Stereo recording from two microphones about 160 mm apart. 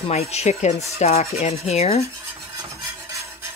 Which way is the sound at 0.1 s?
45° left (ahead or behind).